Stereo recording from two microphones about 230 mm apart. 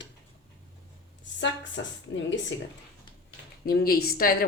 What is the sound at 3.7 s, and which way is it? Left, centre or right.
Speech, left.